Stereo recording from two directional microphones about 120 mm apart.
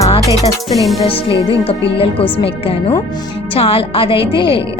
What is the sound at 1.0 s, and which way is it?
A woman's voice, 50° left (ahead or behind).